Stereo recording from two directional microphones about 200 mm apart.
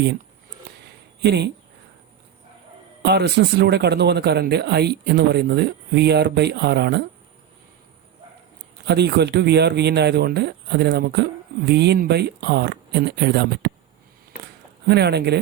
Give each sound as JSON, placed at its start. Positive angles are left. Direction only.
{"t": 0.9, "sound": "a sound", "side_deg": -55}
{"t": 3.0, "sound": "speech", "side_deg": -55}
{"t": 8.9, "sound": "speech", "side_deg": -55}
{"t": 14.8, "sound": "speech", "side_deg": -55}